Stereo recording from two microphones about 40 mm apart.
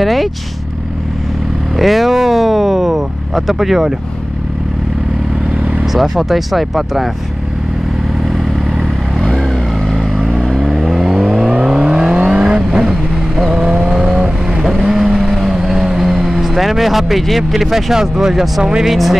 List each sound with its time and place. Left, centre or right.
0.0 s speech: centre
1.8 s vehicle: centre
5.9 s speech: centre
9.9 s vehicle: centre
17.5 s speech: centre